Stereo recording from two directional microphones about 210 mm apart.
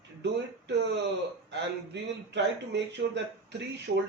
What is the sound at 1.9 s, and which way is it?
A man's voice, 55° right (ahead or behind).